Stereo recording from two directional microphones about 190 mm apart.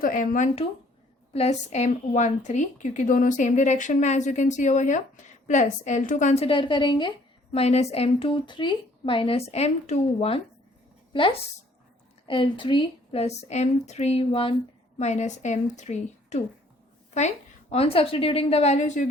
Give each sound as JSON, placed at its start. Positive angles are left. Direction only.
{"t": 0.0, "sound": "a woman's voice", "side_deg": 45}
{"t": 12.2, "sound": "a woman's voice", "side_deg": 25}